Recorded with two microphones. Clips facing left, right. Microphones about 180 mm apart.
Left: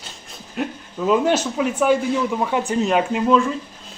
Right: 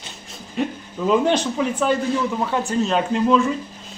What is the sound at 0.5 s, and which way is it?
Speech, centre (ahead or behind).